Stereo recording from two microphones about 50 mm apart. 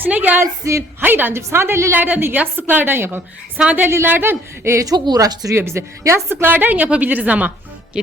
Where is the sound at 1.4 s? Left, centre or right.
Right.